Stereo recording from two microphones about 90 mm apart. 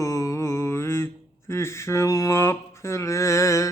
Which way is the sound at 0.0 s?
35° left (ahead or behind).